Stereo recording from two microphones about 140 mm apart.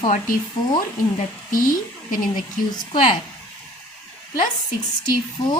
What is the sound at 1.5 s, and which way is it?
Speech, 75° left (ahead or behind).